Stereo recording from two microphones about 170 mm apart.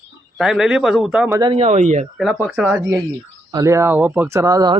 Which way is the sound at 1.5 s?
40° right (ahead or behind).